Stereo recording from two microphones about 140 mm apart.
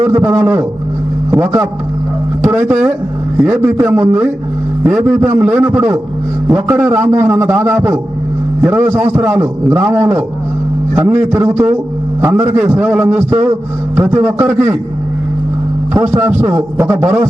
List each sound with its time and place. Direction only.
0.1 s a man's voice: 10° right (ahead or behind)
16.0 s a man's voice: 20° right (ahead or behind)